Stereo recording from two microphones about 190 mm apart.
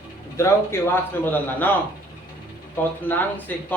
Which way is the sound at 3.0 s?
10° left (ahead or behind).